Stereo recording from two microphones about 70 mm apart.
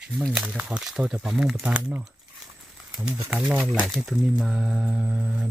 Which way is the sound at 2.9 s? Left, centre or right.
Centre.